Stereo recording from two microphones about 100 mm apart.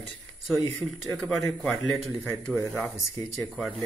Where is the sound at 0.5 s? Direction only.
Centre (ahead or behind).